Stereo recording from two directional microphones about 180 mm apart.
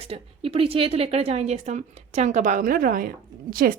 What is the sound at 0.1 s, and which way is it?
A woman's voice, 30° right (ahead or behind).